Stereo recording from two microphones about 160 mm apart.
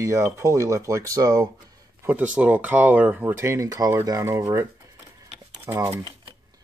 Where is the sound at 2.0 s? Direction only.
10° right (ahead or behind).